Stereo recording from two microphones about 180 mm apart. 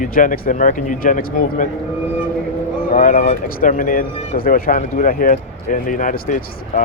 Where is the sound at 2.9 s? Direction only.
45° left (ahead or behind).